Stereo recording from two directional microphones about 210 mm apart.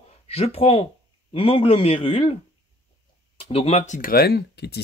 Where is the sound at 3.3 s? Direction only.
25° left (ahead or behind); by 4.8 s 50° left (ahead or behind).